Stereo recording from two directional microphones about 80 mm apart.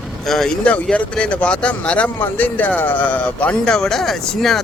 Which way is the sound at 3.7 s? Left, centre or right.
Centre.